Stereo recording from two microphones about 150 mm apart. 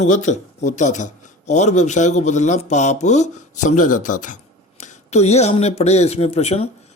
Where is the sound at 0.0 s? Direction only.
55° left (ahead or behind).